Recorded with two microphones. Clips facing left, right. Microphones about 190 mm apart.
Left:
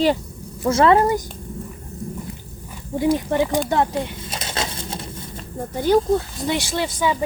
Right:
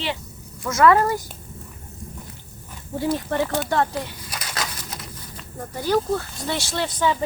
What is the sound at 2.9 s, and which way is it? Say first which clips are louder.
Speech: left 4 dB; 15° left (ahead or behind).